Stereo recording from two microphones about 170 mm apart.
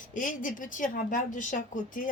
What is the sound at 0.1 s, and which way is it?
A woman's voice, 50° left (ahead or behind).